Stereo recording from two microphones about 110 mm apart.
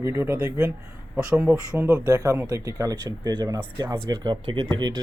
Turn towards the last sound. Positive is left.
turn(degrees=-45)  # may be behind; listen again after turning